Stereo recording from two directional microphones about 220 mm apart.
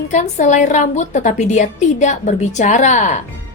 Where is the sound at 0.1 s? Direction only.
35° left (ahead or behind).